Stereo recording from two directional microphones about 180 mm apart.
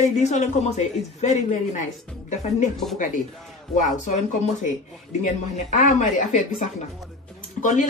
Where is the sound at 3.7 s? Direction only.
45° left (ahead or behind).